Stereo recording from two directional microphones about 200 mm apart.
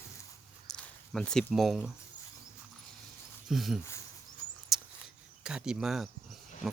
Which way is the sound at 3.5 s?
Centre (ahead or behind).